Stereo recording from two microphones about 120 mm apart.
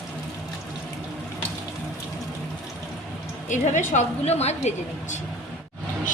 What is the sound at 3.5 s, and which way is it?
A woman's voice, 90° left.